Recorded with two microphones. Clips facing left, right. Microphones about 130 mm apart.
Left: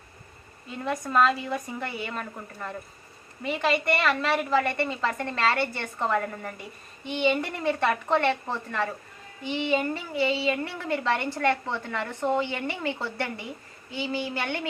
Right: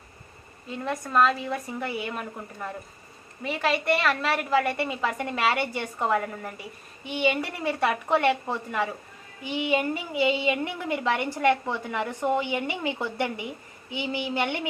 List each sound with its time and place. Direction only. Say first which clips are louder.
0.7 s a woman's voice: even; centre (ahead or behind); by 14.7 s 15° right (ahead or behind)